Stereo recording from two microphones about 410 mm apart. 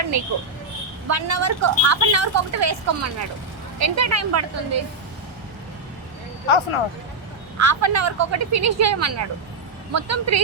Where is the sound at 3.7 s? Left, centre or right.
Right.